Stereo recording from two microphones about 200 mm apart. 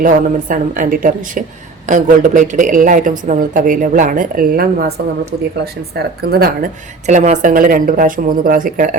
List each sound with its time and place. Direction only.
0.0 s a woman's voice: 40° right (ahead or behind)
6.0 s speech: 50° right (ahead or behind)